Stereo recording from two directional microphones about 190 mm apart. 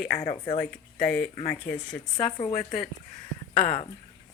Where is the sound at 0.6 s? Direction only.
5° left (ahead or behind).